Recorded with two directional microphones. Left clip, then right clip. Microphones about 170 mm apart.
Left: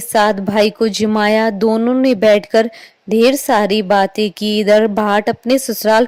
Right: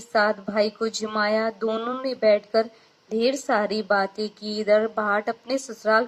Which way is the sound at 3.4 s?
40° left (ahead or behind).